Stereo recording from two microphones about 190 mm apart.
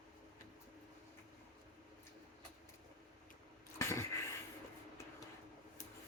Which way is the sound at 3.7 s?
15° left (ahead or behind).